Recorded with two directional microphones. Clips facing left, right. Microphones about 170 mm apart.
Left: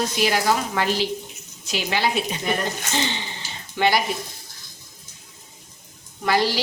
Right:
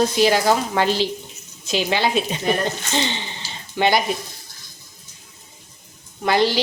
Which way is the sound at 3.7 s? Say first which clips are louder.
Right 2 dB; 20° right (ahead or behind).